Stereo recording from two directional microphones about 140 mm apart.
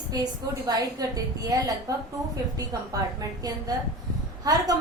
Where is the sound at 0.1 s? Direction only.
30° right (ahead or behind).